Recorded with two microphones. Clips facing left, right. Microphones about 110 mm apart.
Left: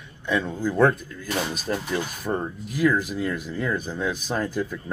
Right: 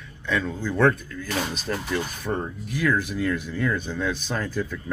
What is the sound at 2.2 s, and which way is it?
Speech, 5° left (ahead or behind).